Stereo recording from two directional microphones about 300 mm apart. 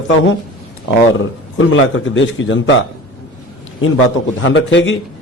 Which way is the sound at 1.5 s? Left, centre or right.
Left.